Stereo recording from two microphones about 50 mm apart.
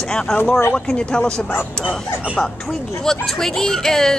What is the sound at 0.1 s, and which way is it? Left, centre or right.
A woman's voice, centre.